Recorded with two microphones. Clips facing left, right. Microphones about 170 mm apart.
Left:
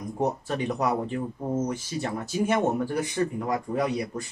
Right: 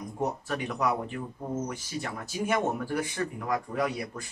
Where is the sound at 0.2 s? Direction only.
30° left (ahead or behind).